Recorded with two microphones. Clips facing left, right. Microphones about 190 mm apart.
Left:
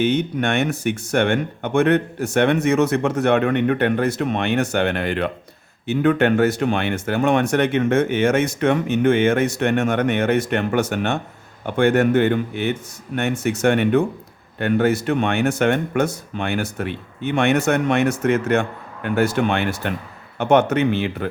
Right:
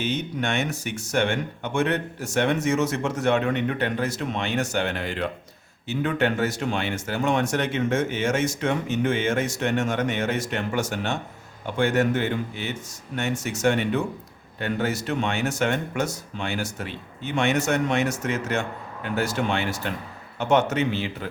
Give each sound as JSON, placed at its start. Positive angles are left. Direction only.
{"t": 0.0, "sound": "speech", "side_deg": 60}